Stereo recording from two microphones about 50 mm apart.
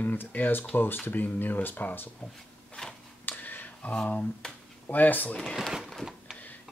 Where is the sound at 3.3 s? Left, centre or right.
Left.